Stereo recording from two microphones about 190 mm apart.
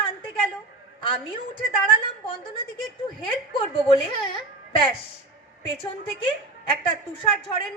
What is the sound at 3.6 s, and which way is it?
Speech, 30° left (ahead or behind).